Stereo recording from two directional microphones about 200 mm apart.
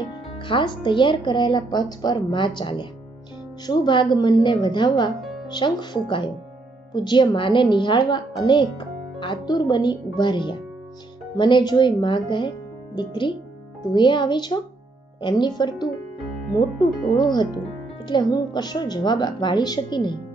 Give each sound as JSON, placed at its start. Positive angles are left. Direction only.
{"t": 0.4, "sound": "speech", "side_deg": 25}
{"t": 17.2, "sound": "speech", "side_deg": 20}